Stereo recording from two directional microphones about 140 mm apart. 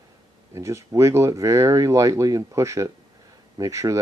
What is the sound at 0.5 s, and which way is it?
Speech, 20° right (ahead or behind).